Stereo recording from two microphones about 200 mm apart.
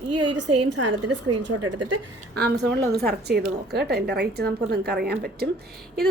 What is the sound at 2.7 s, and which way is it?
A woman's voice, 55° right (ahead or behind).